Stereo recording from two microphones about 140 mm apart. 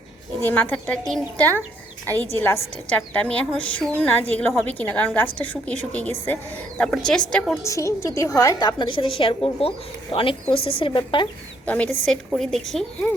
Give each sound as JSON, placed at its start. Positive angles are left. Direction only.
{"t": 0.4, "sound": "a woman's voice", "side_deg": 10}
{"t": 2.4, "sound": "a woman's voice", "side_deg": 10}
{"t": 7.6, "sound": "a woman's voice", "side_deg": 20}
{"t": 11.6, "sound": "a woman's voice", "side_deg": 10}